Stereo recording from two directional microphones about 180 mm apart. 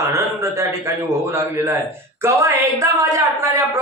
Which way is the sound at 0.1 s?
15° right (ahead or behind).